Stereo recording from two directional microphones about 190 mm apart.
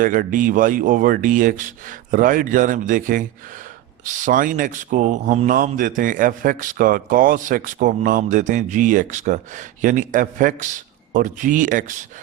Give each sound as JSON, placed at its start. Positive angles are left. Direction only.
{"t": 0.0, "sound": "speech", "side_deg": -45}